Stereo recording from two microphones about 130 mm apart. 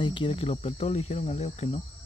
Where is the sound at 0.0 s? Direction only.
40° left (ahead or behind).